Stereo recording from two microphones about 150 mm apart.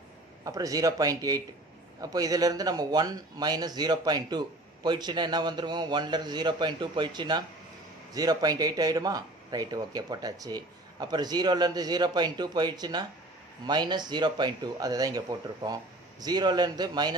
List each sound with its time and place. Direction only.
0.4 s speech: 25° right (ahead or behind)